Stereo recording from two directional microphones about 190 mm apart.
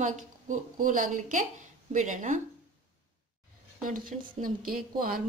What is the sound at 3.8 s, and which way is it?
Speech, 45° right (ahead or behind).